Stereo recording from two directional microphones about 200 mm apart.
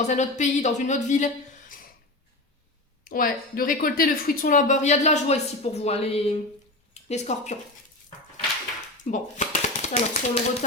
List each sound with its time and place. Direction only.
0.0 s a woman's voice: 35° left (ahead or behind)
3.1 s a woman's voice: 45° left (ahead or behind)
9.0 s speech: 40° left (ahead or behind)